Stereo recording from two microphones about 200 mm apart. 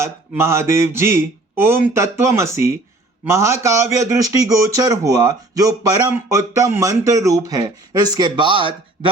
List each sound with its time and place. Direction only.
0.0 s a man's voice: 15° right (ahead or behind)